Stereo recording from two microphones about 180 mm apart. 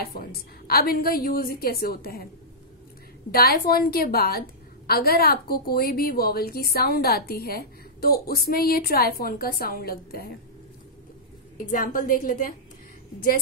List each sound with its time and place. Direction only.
0.0 s a woman's voice: 55° left (ahead or behind)
3.3 s a woman's voice: 55° left (ahead or behind)
11.5 s a woman's voice: 50° left (ahead or behind)